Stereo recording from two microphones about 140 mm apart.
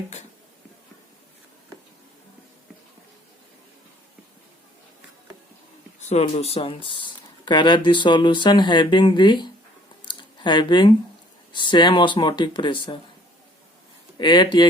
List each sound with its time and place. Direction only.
6.0 s speech: 50° left (ahead or behind); by 9.5 s 35° left (ahead or behind)
10.1 s a sound: 35° left (ahead or behind)
11.5 s speech: 35° left (ahead or behind)
14.2 s speech: 35° left (ahead or behind)